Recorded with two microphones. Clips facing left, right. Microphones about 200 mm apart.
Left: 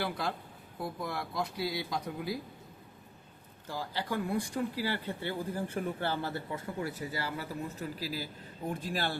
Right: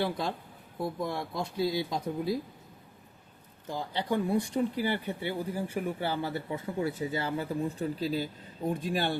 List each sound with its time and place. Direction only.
0.0 s speech: 25° right (ahead or behind)
3.7 s speech: 20° right (ahead or behind)